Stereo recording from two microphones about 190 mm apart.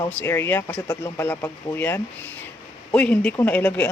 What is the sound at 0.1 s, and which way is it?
Speech, 10° left (ahead or behind).